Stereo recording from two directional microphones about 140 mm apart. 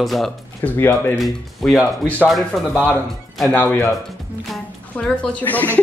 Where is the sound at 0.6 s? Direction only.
15° left (ahead or behind).